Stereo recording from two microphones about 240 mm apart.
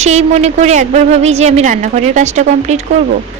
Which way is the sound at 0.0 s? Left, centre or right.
Right.